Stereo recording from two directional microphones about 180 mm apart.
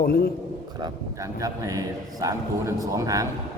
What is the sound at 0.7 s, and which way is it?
A man's voice, 20° right (ahead or behind).